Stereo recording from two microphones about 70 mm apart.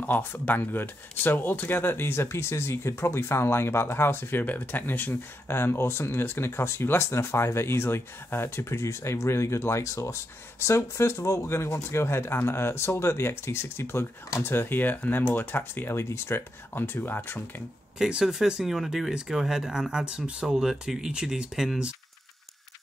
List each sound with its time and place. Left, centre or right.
0.0 s speech: left
17.9 s speech: centre